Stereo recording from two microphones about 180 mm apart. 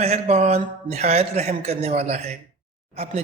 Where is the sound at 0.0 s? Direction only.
40° right (ahead or behind).